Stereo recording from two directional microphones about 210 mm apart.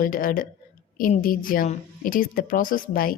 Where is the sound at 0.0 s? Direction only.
40° left (ahead or behind).